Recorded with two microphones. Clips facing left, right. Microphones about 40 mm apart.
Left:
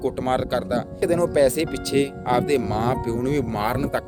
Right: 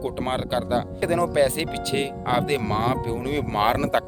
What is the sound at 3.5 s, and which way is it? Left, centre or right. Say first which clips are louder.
Speech: right 3 dB; right.